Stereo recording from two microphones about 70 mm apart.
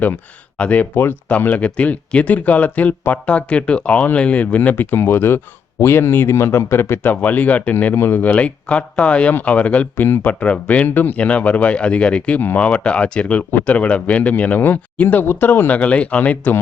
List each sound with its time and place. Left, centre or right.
0.5 s speech: centre